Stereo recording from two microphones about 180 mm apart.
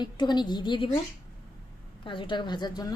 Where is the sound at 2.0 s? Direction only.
25° left (ahead or behind).